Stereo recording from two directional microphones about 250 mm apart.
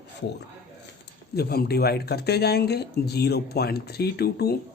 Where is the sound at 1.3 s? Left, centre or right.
Left.